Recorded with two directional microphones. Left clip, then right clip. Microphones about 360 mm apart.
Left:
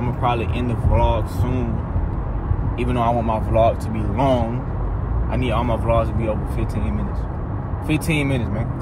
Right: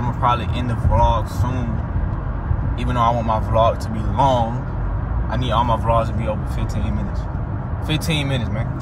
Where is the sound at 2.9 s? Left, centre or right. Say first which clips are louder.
Right 2 dB; right.